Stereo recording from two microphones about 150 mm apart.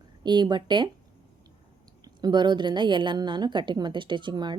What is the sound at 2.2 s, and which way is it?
A woman's voice, 30° right (ahead or behind).